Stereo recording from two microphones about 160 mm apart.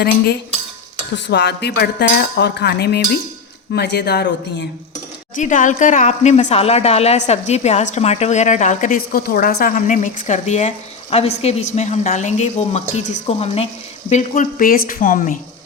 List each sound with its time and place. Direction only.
1.1 s speech: 90° left
5.4 s a woman's voice: 50° left (ahead or behind)
14.1 s speech: 50° left (ahead or behind)